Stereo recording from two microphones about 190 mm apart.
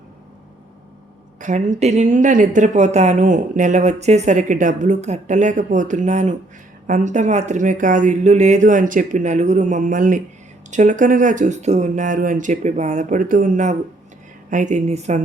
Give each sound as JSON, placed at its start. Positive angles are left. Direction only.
{"t": 1.4, "sound": "speech", "side_deg": -40}